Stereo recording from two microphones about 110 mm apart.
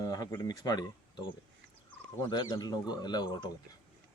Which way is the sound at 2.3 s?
35° left (ahead or behind).